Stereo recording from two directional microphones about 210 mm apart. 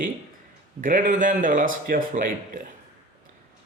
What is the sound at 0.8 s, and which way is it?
Speech, 40° right (ahead or behind).